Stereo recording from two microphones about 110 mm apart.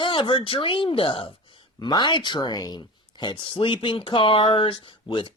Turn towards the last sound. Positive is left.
turn(degrees=45)  # may be behind; listen again after turning